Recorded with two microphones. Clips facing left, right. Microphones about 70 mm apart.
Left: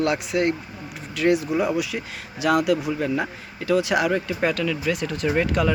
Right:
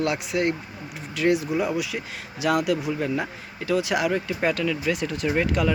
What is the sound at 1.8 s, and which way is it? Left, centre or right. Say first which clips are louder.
Speech: left 2 dB; centre.